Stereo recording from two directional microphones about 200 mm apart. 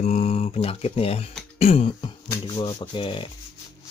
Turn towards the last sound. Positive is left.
turn(degrees=25)  # may be behind; listen again after turning